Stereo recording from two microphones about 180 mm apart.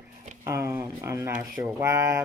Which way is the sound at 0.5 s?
15° right (ahead or behind).